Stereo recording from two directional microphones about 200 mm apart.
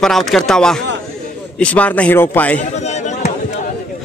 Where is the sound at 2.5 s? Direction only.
35° left (ahead or behind).